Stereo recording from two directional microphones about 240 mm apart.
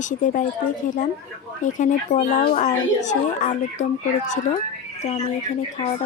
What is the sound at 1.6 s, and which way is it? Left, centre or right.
Speech, left.